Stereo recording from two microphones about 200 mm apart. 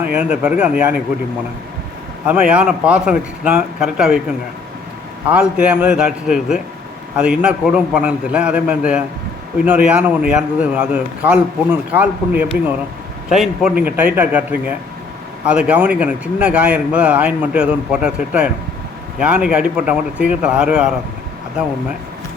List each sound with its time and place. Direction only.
0.0 s speech: 5° right (ahead or behind)
2.2 s speech: 5° right (ahead or behind)
5.3 s speech: 5° right (ahead or behind)
15.4 s speech: 5° right (ahead or behind)